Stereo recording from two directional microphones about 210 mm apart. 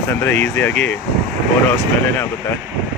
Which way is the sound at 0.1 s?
10° left (ahead or behind).